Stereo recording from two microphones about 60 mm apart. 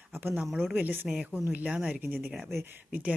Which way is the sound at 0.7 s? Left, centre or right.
Right.